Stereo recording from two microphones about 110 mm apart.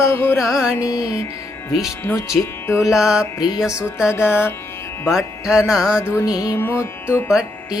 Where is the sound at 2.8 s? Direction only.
5° right (ahead or behind).